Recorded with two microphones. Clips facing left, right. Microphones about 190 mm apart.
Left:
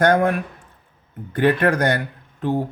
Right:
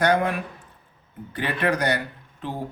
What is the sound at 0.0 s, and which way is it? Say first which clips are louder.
Speech: left 4 dB; 50° left (ahead or behind).